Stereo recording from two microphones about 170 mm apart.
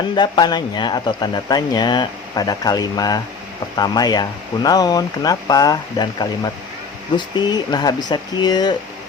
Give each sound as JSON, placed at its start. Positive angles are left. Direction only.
{"t": 0.2, "sound": "speech", "side_deg": 25}